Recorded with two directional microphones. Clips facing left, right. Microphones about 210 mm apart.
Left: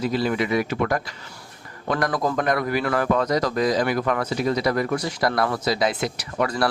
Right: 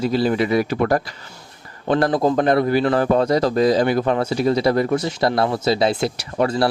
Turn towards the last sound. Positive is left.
turn(degrees=-25)  # may be behind; listen again after turning